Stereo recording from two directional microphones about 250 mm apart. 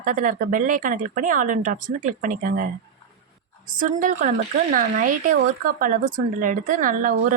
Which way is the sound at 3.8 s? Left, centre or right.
Right.